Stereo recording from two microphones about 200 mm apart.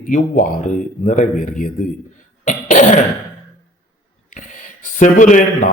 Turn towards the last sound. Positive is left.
turn(degrees=40)  # may be behind; listen again after turning